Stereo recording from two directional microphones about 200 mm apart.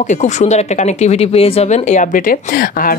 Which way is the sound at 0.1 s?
35° left (ahead or behind).